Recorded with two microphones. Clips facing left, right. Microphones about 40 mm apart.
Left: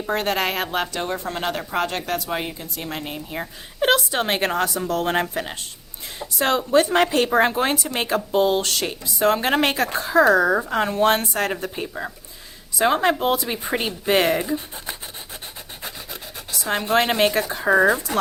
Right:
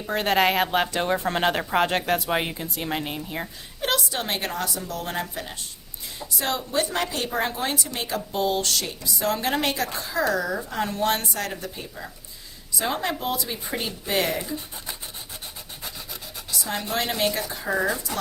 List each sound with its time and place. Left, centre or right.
0.1 s speech: centre
1.2 s speech: right; by 3.2 s centre
3.2 s speech: centre
3.8 s a woman's voice: left
10.8 s a woman's voice: left
16.5 s speech: left